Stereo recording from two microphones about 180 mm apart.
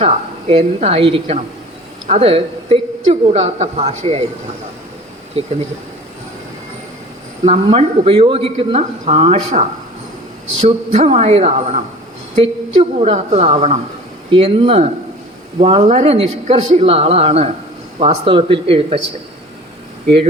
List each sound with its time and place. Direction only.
0.0 s speech: 35° right (ahead or behind)
7.4 s speech: 35° right (ahead or behind)
10.9 s speech: 35° right (ahead or behind)